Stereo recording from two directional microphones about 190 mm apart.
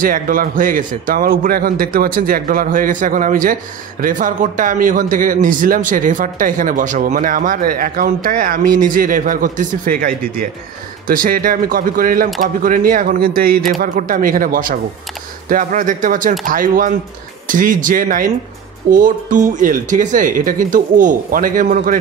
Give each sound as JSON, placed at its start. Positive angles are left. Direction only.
{"t": 0.0, "sound": "a man's voice", "side_deg": -45}